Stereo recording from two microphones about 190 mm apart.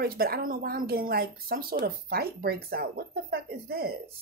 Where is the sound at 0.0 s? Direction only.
55° right (ahead or behind).